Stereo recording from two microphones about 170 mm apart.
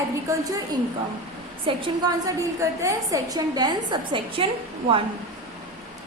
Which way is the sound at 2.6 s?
15° right (ahead or behind).